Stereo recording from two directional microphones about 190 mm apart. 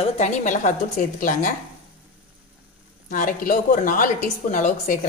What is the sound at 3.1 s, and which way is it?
A woman's voice, 45° left (ahead or behind).